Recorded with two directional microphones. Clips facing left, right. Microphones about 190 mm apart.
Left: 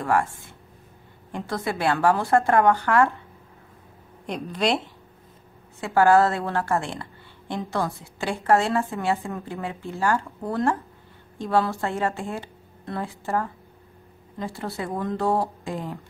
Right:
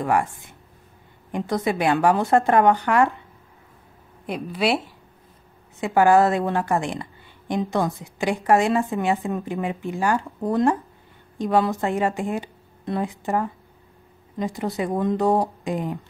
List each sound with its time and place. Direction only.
0.0 s a woman's voice: 15° right (ahead or behind)
4.3 s a woman's voice: 5° right (ahead or behind)